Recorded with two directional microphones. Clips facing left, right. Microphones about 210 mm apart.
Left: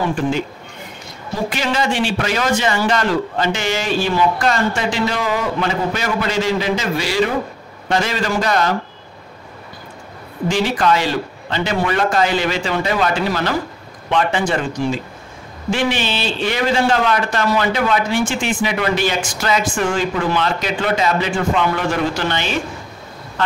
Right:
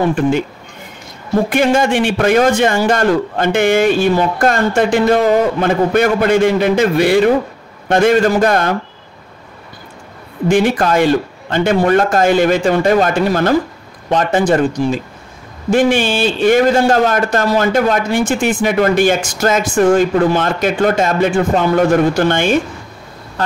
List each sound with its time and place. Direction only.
1.3 s a man's voice: 55° right (ahead or behind)
10.5 s a man's voice: 50° right (ahead or behind)